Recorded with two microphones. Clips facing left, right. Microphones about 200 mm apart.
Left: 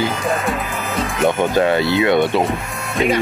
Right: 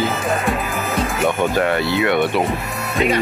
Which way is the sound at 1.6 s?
20° left (ahead or behind).